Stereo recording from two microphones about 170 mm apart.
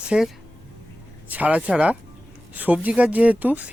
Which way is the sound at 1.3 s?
10° right (ahead or behind).